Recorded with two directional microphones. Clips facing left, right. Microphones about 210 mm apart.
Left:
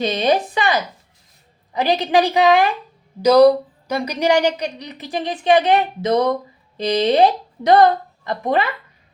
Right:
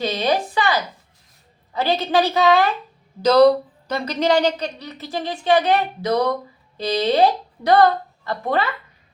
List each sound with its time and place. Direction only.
0.0 s speech: 20° left (ahead or behind)